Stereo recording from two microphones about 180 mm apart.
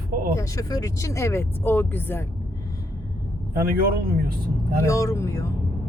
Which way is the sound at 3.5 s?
55° right (ahead or behind).